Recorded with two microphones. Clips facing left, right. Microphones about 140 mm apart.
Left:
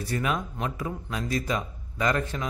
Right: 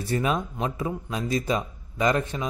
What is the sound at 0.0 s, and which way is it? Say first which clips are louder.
A man's voice: right 3 dB; 25° right (ahead or behind).